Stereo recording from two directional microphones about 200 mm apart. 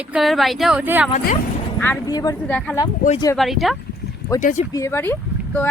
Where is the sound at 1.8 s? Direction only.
15° left (ahead or behind).